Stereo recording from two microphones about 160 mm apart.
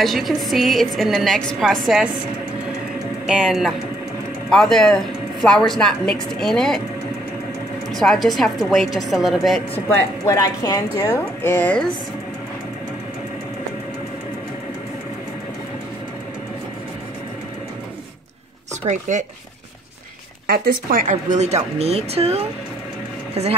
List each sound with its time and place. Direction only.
0.0 s a woman's voice: centre (ahead or behind)
3.3 s a woman's voice: 5° right (ahead or behind)
7.9 s a woman's voice: centre (ahead or behind)
9.8 s a woman's voice: 15° left (ahead or behind)
18.9 s speech: 50° right (ahead or behind)
21.1 s speech: 45° right (ahead or behind)